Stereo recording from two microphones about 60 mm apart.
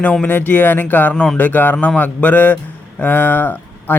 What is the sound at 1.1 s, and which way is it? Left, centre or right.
Speech, centre.